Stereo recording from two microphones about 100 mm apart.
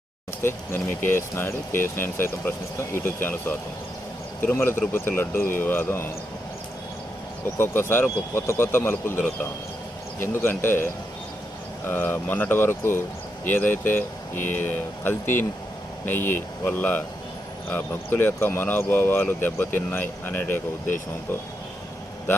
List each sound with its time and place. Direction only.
0.4 s speech: 25° left (ahead or behind)
4.4 s speech: 25° left (ahead or behind)
7.6 s speech: 25° left (ahead or behind)
11.9 s speech: 20° left (ahead or behind)